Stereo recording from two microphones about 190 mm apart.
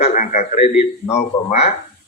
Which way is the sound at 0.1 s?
40° left (ahead or behind).